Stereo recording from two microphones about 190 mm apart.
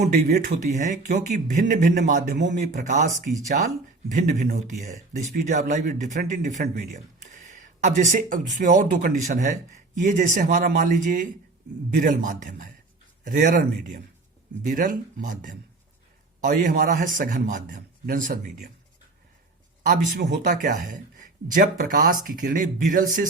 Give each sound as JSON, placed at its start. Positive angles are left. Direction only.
{"t": 0.1, "sound": "speech", "side_deg": -40}
{"t": 2.1, "sound": "a man's voice", "side_deg": -65}
{"t": 2.7, "sound": "speech", "side_deg": -40}
{"t": 4.1, "sound": "a man's voice", "side_deg": -40}
{"t": 7.4, "sound": "a sound", "side_deg": -40}
{"t": 8.5, "sound": "a man's voice", "side_deg": -45}
{"t": 19.9, "sound": "a man's voice", "side_deg": -45}